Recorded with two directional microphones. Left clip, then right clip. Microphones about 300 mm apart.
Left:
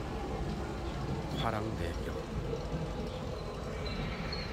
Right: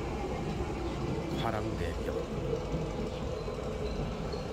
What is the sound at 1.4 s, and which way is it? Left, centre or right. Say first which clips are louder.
Speech: left 1 dB; centre.